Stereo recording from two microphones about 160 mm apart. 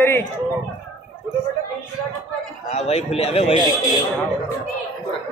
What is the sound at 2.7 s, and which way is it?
Speech, 40° left (ahead or behind).